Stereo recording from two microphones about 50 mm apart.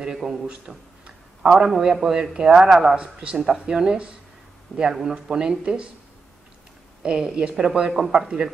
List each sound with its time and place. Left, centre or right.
0.0 s a man's voice: centre
7.0 s a man's voice: centre